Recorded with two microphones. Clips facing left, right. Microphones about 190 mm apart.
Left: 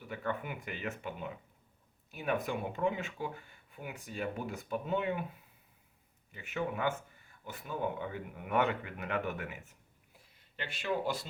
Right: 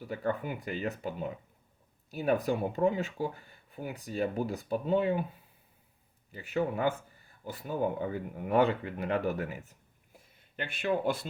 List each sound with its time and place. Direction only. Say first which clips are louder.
0.1 s speech: right 5 dB; 35° right (ahead or behind)
6.3 s speech: right 5 dB; 35° right (ahead or behind)
10.6 s speech: right 4 dB; 55° right (ahead or behind)